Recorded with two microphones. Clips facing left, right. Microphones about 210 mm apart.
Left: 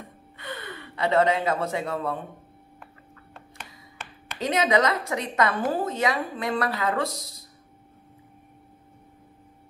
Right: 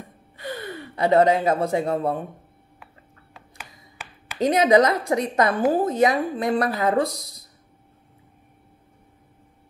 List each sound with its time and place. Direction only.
0.4 s speech: 35° right (ahead or behind)
4.5 s speech: 35° right (ahead or behind)